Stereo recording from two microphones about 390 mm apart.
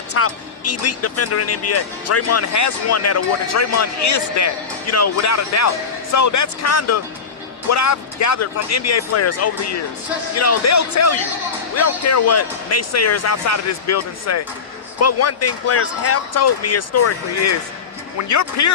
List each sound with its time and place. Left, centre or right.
0.1 s speech: left